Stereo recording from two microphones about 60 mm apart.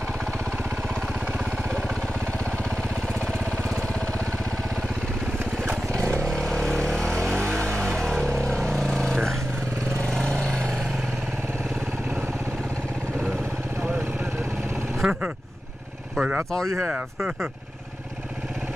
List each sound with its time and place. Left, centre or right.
5.9 s vehicle: centre
15.0 s vehicle: centre
16.2 s speech: right